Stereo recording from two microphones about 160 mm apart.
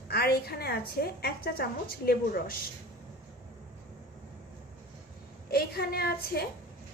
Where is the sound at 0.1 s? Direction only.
75° left (ahead or behind).